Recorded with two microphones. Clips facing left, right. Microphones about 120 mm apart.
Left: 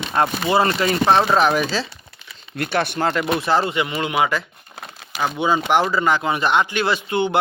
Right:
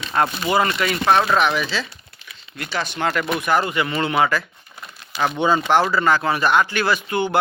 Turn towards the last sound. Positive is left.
turn(degrees=20)  # may be behind; listen again after turning